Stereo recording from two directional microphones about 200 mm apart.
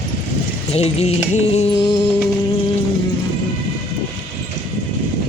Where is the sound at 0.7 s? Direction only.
30° left (ahead or behind).